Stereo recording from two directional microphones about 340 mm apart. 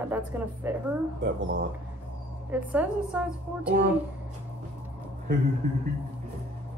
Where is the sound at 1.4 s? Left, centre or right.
Right.